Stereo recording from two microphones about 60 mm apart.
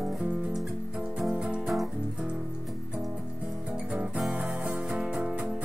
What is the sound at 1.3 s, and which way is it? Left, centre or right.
Music, centre.